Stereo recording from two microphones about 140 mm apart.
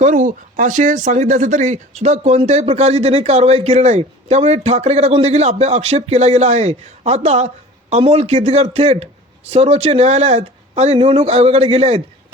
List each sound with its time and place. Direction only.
0.0 s speech: 70° right (ahead or behind); by 12.0 s 45° right (ahead or behind)